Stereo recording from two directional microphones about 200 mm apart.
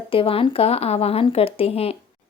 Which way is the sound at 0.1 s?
25° left (ahead or behind).